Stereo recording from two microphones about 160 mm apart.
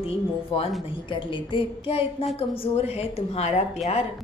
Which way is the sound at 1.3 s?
35° left (ahead or behind).